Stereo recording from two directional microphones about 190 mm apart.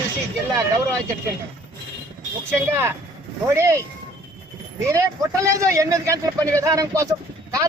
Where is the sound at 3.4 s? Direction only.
15° right (ahead or behind).